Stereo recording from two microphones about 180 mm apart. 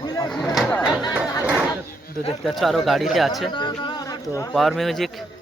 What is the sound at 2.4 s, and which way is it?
Speech, centre (ahead or behind).